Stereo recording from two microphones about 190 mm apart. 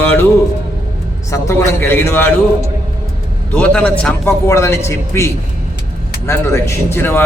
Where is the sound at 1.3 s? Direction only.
15° left (ahead or behind).